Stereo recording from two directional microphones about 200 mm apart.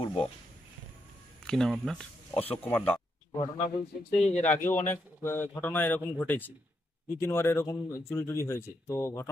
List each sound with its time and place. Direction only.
0.0 s speech: 25° left (ahead or behind)
1.4 s speech: centre (ahead or behind)
3.3 s a man's voice: 25° left (ahead or behind)
4.8 s speech: 10° left (ahead or behind)